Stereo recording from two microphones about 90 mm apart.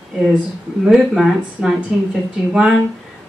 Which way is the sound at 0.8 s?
5° right (ahead or behind).